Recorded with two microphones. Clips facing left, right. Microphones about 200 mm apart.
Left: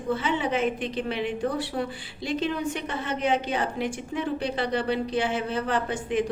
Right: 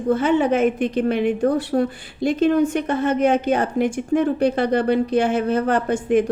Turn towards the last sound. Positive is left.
turn(degrees=-45)  # may be behind; listen again after turning